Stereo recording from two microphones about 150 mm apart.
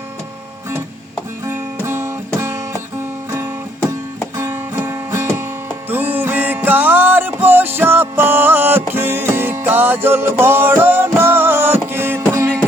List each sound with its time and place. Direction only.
1.5 s music: 15° right (ahead or behind)